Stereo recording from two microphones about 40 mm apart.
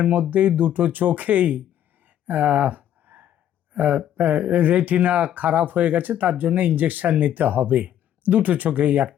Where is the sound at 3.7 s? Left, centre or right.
Right.